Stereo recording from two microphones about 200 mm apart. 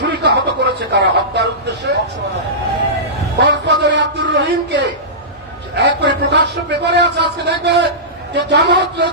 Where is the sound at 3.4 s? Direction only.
60° right (ahead or behind).